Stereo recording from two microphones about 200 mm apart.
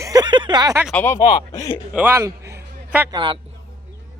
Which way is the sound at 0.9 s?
15° left (ahead or behind).